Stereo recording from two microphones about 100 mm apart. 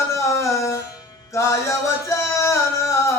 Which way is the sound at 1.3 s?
30° left (ahead or behind).